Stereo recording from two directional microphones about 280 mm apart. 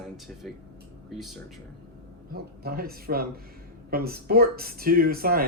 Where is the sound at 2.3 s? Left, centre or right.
Right.